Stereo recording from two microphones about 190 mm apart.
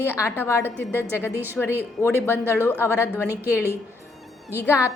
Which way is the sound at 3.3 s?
10° right (ahead or behind).